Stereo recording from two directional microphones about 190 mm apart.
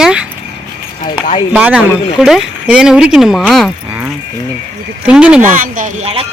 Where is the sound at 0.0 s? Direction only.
5° right (ahead or behind).